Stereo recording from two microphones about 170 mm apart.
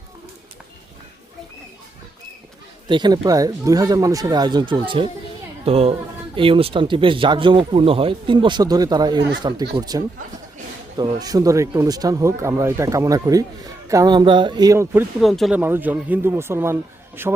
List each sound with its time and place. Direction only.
2.9 s speech: 25° right (ahead or behind)
15.2 s speech: centre (ahead or behind)